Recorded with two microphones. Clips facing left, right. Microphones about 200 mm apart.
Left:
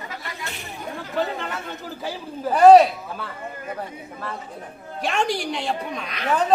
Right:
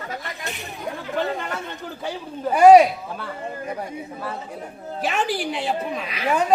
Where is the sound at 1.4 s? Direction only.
Centre (ahead or behind).